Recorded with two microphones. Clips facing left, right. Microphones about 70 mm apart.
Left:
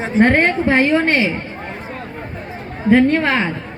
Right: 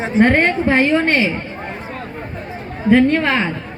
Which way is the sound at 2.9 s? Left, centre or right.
Left.